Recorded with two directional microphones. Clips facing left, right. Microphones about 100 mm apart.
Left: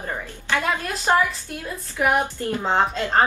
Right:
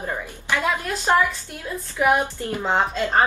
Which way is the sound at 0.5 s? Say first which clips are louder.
Even; 15° left (ahead or behind).